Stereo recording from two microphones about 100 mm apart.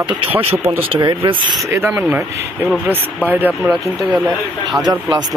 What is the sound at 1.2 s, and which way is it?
Speech, 60° right (ahead or behind).